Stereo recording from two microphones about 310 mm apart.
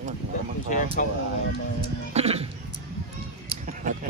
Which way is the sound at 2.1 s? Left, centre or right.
Centre.